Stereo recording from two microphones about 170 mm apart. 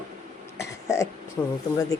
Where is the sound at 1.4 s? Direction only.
10° left (ahead or behind).